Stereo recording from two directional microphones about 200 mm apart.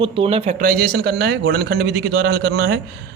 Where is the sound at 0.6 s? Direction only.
50° right (ahead or behind).